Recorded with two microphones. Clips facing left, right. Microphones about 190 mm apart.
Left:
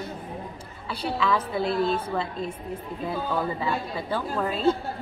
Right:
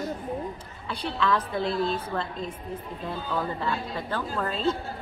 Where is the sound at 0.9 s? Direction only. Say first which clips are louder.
Left 1 dB; 5° left (ahead or behind).